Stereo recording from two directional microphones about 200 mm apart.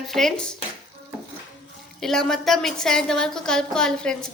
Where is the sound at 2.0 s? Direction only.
Centre (ahead or behind).